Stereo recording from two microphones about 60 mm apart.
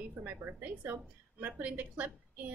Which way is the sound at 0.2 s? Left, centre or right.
Right.